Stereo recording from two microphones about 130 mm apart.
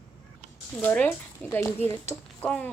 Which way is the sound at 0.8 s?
15° left (ahead or behind).